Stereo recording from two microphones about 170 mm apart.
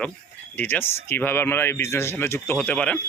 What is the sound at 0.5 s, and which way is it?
Speech, 10° left (ahead or behind).